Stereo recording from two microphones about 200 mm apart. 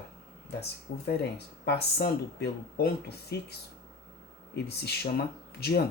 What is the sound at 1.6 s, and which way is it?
Speech, 55° left (ahead or behind).